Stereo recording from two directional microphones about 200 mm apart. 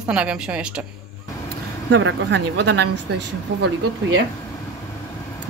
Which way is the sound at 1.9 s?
65° right (ahead or behind).